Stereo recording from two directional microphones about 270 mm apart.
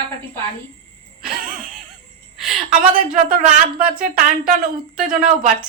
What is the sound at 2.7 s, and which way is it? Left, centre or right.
Speech, right.